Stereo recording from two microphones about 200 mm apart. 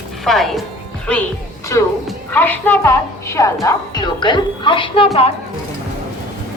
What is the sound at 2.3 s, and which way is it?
A woman's voice, 10° left (ahead or behind).